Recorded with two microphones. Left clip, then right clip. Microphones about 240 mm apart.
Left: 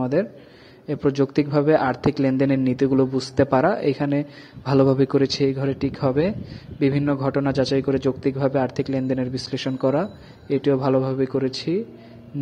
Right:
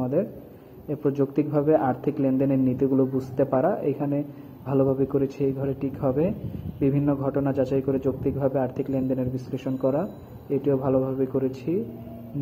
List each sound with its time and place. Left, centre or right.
0.0 s a man's voice: left